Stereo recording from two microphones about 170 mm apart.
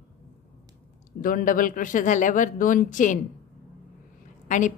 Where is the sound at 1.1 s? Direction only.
55° left (ahead or behind).